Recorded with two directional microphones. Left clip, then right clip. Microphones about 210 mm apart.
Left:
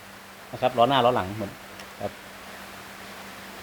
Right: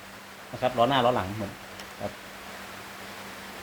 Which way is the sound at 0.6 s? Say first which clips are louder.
Left 3 dB; 35° left (ahead or behind).